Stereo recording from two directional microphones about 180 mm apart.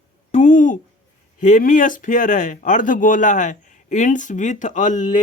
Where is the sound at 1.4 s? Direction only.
45° left (ahead or behind).